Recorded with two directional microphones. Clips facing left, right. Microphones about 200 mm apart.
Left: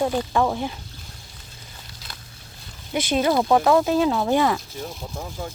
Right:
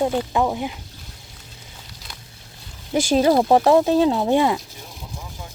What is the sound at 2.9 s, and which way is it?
Speech, 40° right (ahead or behind).